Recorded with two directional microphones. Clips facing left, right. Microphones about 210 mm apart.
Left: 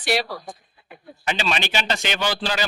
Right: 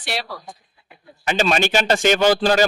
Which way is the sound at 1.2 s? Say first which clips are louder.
Right 6 dB; 45° right (ahead or behind).